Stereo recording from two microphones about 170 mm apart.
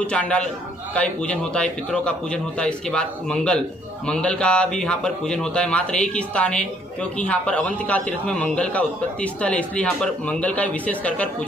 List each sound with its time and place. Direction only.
0.0 s a man's voice: 5° left (ahead or behind)